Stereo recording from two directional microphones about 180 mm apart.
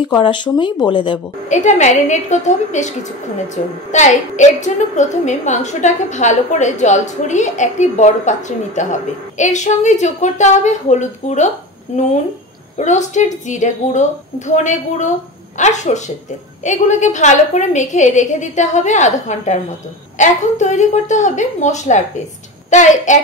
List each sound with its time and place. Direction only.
0.2 s speech: 25° left (ahead or behind)
1.5 s a woman's voice: 40° left (ahead or behind)
12.7 s a woman's voice: 40° left (ahead or behind)